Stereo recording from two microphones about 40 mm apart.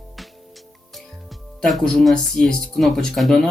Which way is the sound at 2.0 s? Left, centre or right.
Centre.